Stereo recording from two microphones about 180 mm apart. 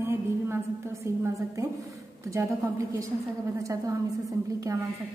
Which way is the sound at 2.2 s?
15° right (ahead or behind).